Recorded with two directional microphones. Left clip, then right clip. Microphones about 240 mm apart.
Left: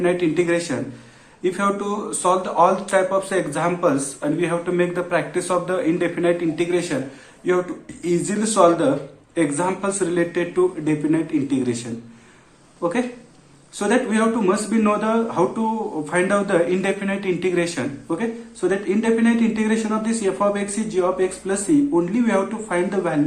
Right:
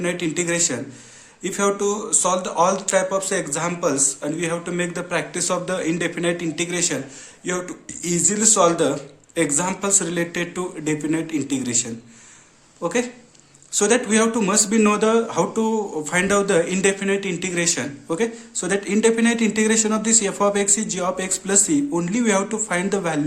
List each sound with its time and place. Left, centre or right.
0.0 s speech: right
8.0 s speech: right
12.8 s speech: right